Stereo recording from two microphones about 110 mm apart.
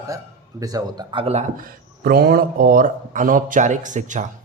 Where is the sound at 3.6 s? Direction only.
90° right.